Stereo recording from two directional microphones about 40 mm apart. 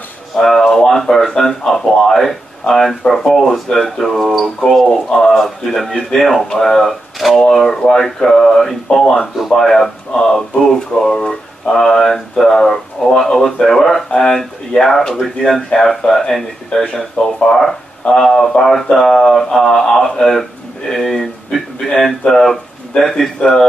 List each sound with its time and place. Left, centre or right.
0.4 s speech: centre
14.1 s speech: centre
17.2 s speech: left
17.5 s speech: centre
20.9 s a sound: centre
22.2 s speech: centre